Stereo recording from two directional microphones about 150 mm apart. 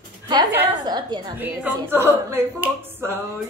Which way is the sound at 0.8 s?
30° right (ahead or behind).